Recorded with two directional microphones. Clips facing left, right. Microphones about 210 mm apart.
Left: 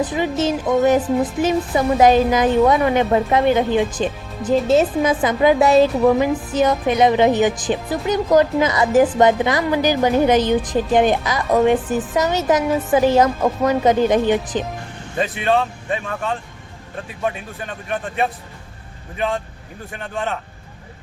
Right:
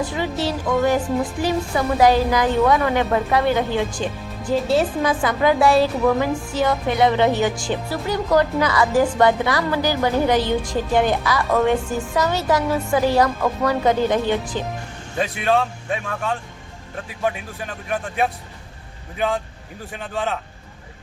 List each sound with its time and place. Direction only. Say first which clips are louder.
0.0 s speech: left 4 dB; 20° left (ahead or behind)
15.2 s speech: left 1 dB; centre (ahead or behind)
19.9 s speech: even; centre (ahead or behind)